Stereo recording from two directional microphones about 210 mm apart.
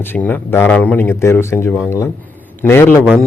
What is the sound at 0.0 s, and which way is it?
Speech, 10° left (ahead or behind).